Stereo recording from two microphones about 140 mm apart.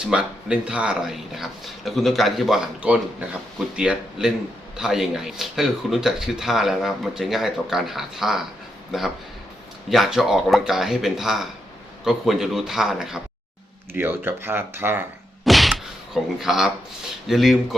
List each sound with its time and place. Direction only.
0.1 s speech: 5° right (ahead or behind)
13.9 s speech: 15° right (ahead or behind)
15.4 s a sound: centre (ahead or behind)
17.2 s speech: centre (ahead or behind)